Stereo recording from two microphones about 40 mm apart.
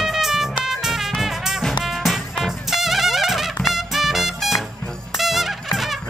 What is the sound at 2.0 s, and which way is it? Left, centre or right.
Music, centre.